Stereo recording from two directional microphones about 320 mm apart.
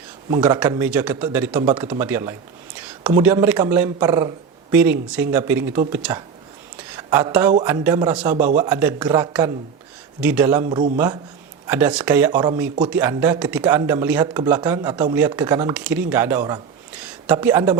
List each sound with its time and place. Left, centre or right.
0.3 s a woman's voice: centre
8.4 s speech: right
8.7 s speech: centre